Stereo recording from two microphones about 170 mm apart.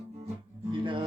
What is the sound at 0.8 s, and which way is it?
Speech, 30° right (ahead or behind).